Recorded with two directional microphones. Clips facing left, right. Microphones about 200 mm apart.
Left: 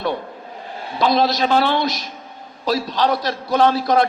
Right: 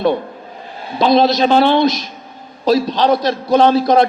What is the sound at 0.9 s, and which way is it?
A man's voice, 25° right (ahead or behind).